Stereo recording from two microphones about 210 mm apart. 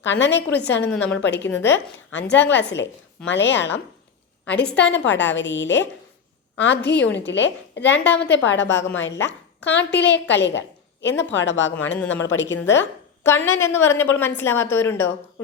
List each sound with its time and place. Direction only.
0.0 s a woman's voice: 60° left (ahead or behind)
0.9 s a woman's voice: 5° left (ahead or behind)
1.2 s a woman's voice: 55° left (ahead or behind)
11.7 s a woman's voice: 10° left (ahead or behind)
12.2 s a woman's voice: 60° left (ahead or behind)
12.8 s a woman's voice: 10° left (ahead or behind)